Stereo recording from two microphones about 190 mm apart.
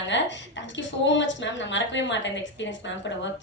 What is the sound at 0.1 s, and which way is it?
A woman's voice, 70° left (ahead or behind).